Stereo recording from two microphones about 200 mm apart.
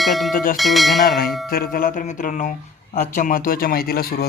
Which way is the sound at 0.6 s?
Centre (ahead or behind).